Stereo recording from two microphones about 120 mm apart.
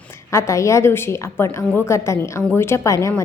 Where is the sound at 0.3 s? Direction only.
25° left (ahead or behind).